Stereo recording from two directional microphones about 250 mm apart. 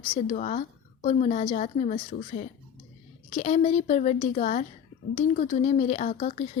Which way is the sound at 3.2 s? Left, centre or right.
Left.